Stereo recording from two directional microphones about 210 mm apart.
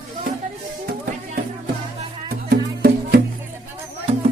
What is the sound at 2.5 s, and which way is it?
Music, 45° right (ahead or behind).